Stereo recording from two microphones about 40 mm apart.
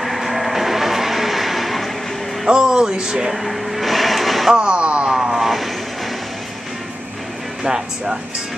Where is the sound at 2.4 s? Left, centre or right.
Centre.